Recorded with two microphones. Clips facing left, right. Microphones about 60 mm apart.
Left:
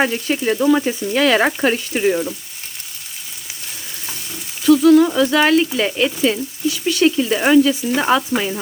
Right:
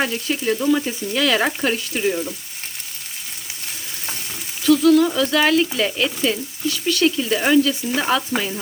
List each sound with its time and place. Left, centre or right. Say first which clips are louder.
0.0 s frying: left 4 dB; left
4.6 s speech: left 3 dB; centre